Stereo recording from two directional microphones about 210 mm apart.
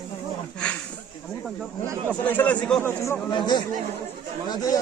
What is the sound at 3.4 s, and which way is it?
Speech, 20° left (ahead or behind).